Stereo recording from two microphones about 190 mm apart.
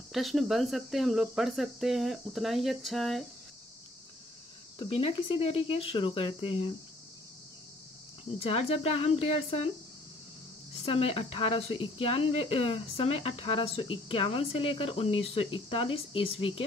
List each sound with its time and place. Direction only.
0.1 s speech: centre (ahead or behind)
4.7 s speech: 30° left (ahead or behind)
8.4 s speech: 30° left (ahead or behind)
10.8 s speech: 30° left (ahead or behind)